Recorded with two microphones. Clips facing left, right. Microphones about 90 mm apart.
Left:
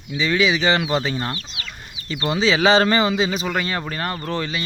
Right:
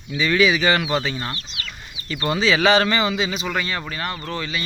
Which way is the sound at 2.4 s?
25° left (ahead or behind).